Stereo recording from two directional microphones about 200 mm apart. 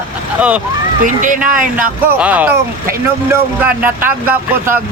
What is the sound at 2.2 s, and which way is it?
Speech, 10° right (ahead or behind).